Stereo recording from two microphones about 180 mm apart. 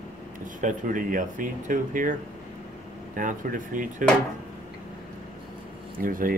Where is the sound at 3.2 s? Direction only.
45° right (ahead or behind).